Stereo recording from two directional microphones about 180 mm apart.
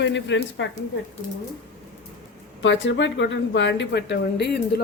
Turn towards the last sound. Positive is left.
turn(degrees=70)  # may be behind; listen again after turning